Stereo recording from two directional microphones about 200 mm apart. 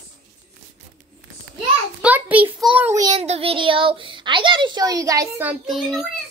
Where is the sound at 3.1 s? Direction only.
30° right (ahead or behind); by 6.0 s centre (ahead or behind).